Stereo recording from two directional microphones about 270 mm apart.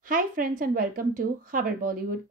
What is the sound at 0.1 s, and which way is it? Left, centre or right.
A woman's voice, right.